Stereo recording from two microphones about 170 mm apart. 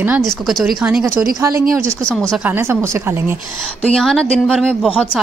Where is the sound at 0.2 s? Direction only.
Centre (ahead or behind).